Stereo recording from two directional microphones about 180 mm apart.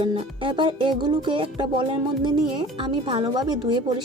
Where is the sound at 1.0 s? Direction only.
25° right (ahead or behind).